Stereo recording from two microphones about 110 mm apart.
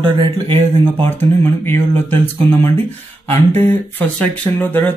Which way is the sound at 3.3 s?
75° right (ahead or behind).